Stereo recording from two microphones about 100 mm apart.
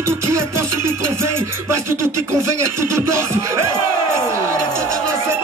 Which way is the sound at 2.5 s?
30° right (ahead or behind).